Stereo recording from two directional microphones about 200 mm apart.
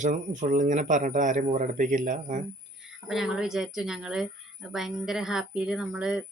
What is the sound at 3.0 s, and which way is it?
A woman's voice, centre (ahead or behind).